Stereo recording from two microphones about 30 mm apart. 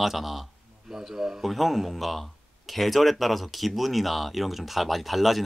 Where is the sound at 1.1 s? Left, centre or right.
Right.